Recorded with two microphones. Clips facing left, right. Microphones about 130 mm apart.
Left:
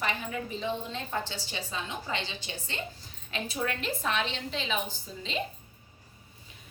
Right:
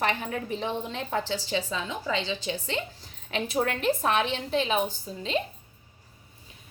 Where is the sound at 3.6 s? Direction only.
60° right (ahead or behind).